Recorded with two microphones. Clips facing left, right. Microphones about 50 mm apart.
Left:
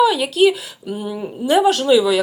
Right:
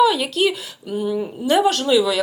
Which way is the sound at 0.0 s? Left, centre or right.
Centre.